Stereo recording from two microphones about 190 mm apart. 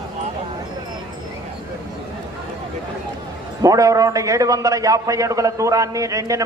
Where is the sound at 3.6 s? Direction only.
20° right (ahead or behind).